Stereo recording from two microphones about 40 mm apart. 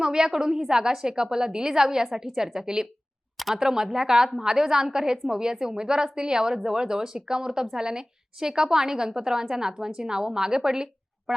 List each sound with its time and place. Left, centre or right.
0.0 s a woman's voice: centre